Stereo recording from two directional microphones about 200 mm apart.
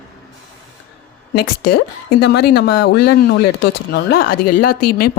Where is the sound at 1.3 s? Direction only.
50° left (ahead or behind).